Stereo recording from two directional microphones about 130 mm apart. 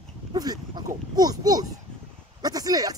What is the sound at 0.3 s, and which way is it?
Speech, 30° right (ahead or behind).